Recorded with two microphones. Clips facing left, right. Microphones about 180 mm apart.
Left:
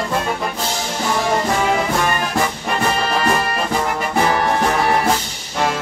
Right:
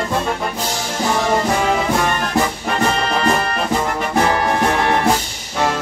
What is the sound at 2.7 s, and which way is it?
Music, 5° left (ahead or behind).